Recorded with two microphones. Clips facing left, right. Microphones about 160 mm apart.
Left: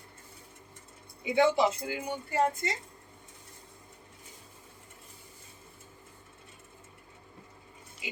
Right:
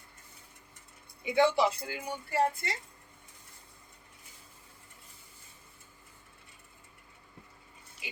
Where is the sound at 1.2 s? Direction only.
20° left (ahead or behind).